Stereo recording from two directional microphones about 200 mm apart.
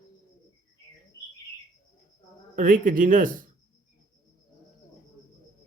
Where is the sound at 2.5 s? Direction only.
40° right (ahead or behind).